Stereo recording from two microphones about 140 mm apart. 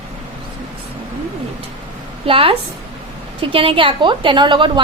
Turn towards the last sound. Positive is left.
turn(degrees=-35)  # may be behind; listen again after turning